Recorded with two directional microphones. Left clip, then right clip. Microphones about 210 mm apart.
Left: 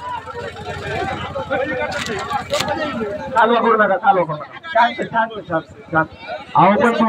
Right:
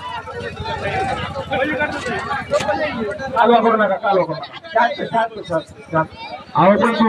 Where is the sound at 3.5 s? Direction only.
45° left (ahead or behind).